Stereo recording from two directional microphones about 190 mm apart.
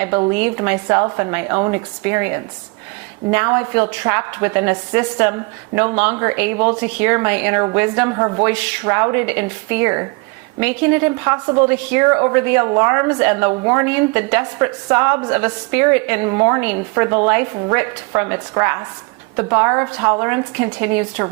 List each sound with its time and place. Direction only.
0.0 s a woman's voice: 20° right (ahead or behind)